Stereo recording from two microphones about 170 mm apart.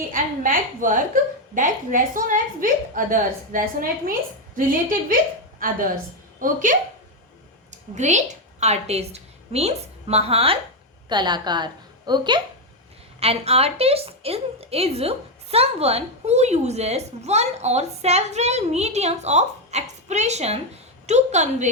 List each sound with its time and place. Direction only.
0.1 s a woman's voice: 50° right (ahead or behind); by 12.4 s 25° right (ahead or behind)
13.1 s a woman's voice: 35° right (ahead or behind)